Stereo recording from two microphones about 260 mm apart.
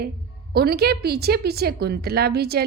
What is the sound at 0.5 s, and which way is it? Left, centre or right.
A woman's voice, right.